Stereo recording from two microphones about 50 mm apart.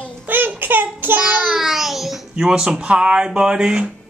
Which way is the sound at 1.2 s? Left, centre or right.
Centre.